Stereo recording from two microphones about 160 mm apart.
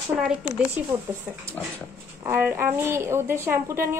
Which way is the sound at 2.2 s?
15° right (ahead or behind).